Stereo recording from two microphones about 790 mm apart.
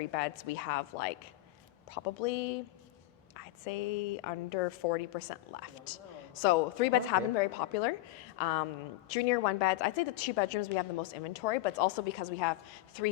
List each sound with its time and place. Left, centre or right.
0.0 s a woman's voice: left
6.4 s a woman's voice: left
12.2 s a woman's voice: left